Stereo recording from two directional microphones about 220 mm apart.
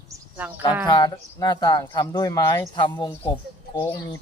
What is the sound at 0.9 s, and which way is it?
Speech, 20° left (ahead or behind).